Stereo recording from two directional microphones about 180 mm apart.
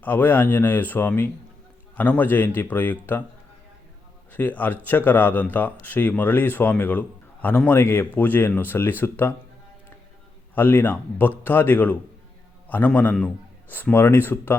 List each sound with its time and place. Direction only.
0.0 s speech: 10° left (ahead or behind)
4.3 s speech: 10° left (ahead or behind)
10.5 s speech: 10° left (ahead or behind)